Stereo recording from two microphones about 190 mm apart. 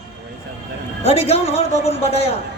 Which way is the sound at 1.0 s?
35° left (ahead or behind).